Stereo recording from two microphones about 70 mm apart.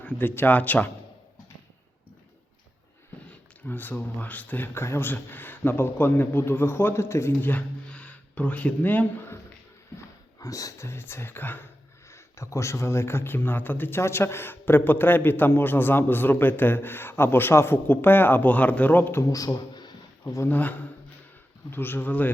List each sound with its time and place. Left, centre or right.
0.0 s speech: left
3.2 s speech: left
7.4 s a sound: left
10.4 s speech: left
12.1 s speech: left
19.3 s speech: left
20.2 s speech: left
20.5 s speech: left